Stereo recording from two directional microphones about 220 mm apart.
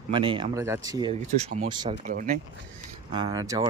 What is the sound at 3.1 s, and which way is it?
Speech, 20° right (ahead or behind).